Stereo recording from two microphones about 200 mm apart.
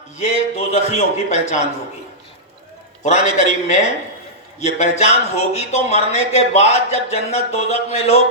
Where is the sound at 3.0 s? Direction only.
35° left (ahead or behind).